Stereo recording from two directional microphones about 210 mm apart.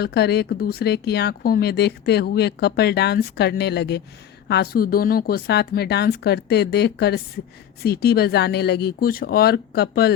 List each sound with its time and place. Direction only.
0.0 s a woman's voice: 50° left (ahead or behind)